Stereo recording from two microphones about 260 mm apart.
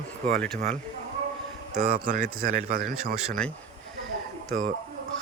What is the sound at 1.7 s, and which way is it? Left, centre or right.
Speech, right.